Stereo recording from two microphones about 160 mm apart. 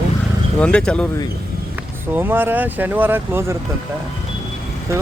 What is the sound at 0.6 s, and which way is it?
Speech, 5° left (ahead or behind).